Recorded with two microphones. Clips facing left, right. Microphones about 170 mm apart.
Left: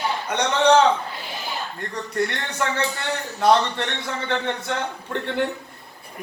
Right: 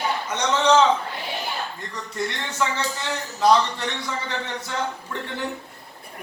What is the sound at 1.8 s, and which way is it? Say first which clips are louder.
A man's voice: left 4 dB; 60° left (ahead or behind).